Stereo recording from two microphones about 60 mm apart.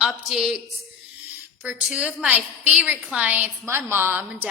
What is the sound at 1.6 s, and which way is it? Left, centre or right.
A woman's voice, centre.